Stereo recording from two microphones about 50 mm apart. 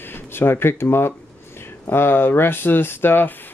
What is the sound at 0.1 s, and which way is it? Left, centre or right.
Speech, left.